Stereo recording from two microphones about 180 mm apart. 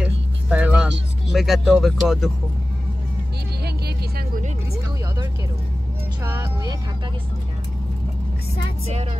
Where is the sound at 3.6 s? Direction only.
65° right (ahead or behind).